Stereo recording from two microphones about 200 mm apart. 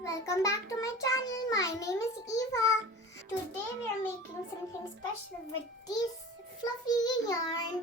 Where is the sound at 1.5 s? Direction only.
15° left (ahead or behind).